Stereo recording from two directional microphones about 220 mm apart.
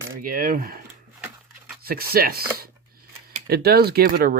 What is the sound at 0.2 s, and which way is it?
Speech, 40° right (ahead or behind).